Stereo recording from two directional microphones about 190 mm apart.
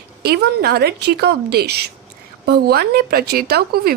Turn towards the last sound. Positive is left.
turn(degrees=-55)  # may be behind; listen again after turning